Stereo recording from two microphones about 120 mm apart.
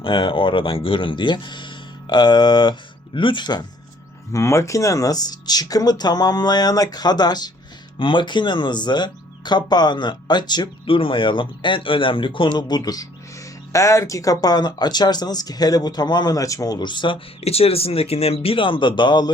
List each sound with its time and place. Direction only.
0.0 s speech: 45° left (ahead or behind)
4.3 s speech: 25° left (ahead or behind); by 17.2 s 40° left (ahead or behind)
17.4 s speech: 55° left (ahead or behind); by 19.3 s 40° left (ahead or behind)